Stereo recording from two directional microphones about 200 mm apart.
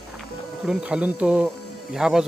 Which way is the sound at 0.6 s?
5° right (ahead or behind).